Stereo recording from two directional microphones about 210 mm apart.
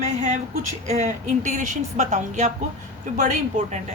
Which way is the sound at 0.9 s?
35° right (ahead or behind).